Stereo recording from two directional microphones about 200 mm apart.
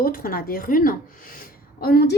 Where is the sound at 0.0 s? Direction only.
45° left (ahead or behind).